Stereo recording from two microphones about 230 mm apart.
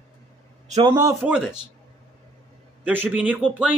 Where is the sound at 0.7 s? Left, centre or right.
Right.